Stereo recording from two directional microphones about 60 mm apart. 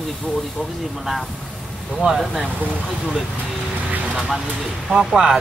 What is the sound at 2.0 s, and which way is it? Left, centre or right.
Speech, centre.